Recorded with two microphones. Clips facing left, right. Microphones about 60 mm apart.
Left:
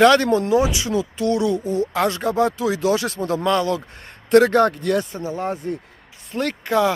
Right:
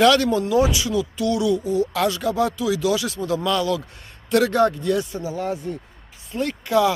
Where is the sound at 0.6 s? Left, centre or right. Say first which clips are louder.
Even; left.